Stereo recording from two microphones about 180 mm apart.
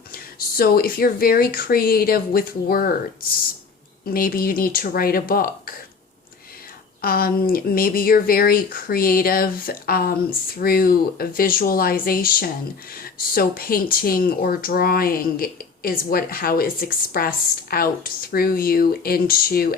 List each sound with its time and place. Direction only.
0.1 s speech: 55° left (ahead or behind)
4.0 s speech: 55° left (ahead or behind)
7.0 s speech: 55° left (ahead or behind)